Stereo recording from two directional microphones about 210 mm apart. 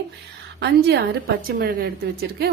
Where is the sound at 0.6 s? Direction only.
50° right (ahead or behind).